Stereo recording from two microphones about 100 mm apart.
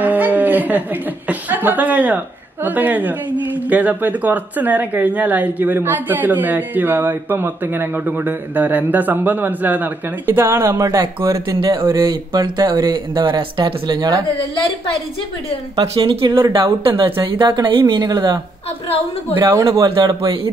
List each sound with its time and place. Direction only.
0.0 s a woman's voice: 15° right (ahead or behind)
11.6 s speech: 60° right (ahead or behind)
12.1 s speech: 45° right (ahead or behind)
15.8 s speech: 65° right (ahead or behind); by 18.4 s 45° right (ahead or behind)
19.5 s speech: 30° right (ahead or behind)
19.8 s speech: 50° right (ahead or behind)